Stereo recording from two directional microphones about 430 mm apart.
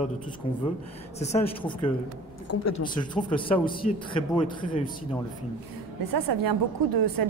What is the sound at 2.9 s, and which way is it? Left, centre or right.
Speech, centre.